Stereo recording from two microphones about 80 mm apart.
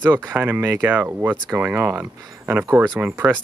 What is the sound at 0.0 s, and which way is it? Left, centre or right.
Speech, right.